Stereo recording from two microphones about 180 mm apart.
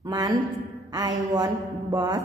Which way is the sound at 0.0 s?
20° right (ahead or behind).